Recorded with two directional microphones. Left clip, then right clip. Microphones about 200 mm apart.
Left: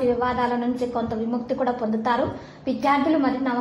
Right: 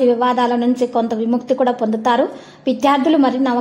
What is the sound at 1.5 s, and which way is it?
A woman's voice, 45° right (ahead or behind).